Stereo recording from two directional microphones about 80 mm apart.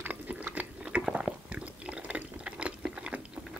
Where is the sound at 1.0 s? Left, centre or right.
Centre.